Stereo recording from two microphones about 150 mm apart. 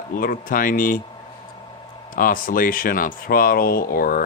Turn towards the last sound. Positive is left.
turn(degrees=75)  # may be behind; listen again after turning